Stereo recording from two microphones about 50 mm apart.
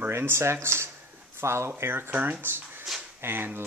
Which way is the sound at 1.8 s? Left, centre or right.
Right.